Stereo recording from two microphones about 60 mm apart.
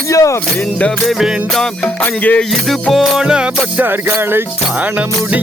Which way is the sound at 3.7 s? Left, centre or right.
Right.